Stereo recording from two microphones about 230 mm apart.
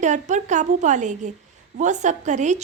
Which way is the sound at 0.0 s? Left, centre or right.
Right.